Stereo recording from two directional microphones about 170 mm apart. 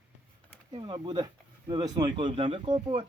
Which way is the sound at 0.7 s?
30° right (ahead or behind).